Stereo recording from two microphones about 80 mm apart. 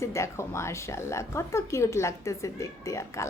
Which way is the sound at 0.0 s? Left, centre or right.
Left.